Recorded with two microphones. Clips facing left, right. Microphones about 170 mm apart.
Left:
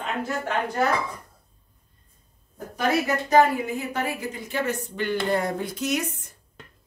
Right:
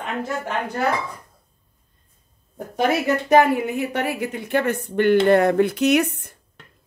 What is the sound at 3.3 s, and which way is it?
A woman's voice, 65° right (ahead or behind).